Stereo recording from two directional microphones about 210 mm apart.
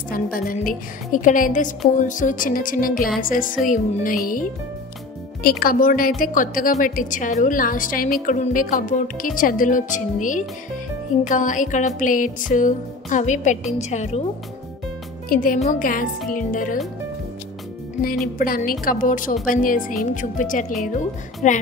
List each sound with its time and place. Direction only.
0.1 s music: 40° left (ahead or behind)
5.4 s music: 45° left (ahead or behind)
15.2 s music: 40° left (ahead or behind)
18.4 s music: 40° left (ahead or behind)